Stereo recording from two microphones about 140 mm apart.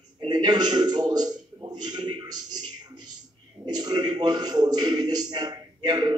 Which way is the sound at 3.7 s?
30° right (ahead or behind).